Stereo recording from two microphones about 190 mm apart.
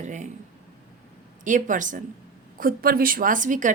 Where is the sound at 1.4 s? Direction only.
45° right (ahead or behind).